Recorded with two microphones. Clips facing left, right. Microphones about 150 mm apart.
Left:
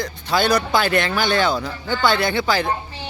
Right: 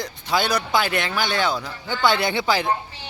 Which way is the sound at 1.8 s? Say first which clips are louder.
Left 1 dB; 25° right (ahead or behind).